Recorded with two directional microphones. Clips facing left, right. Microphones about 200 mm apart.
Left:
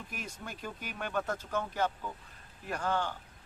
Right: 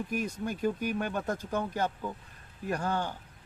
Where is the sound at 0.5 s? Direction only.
45° right (ahead or behind).